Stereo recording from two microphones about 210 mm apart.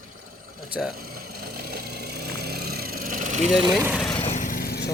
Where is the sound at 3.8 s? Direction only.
Centre (ahead or behind).